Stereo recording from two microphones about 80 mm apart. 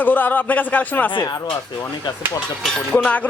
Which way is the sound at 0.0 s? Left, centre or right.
Left.